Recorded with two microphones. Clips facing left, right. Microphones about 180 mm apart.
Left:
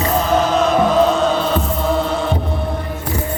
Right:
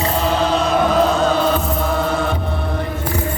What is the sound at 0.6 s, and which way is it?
Music, 35° right (ahead or behind).